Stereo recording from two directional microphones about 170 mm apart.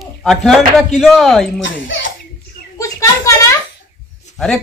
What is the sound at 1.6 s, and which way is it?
Speech, 90° left.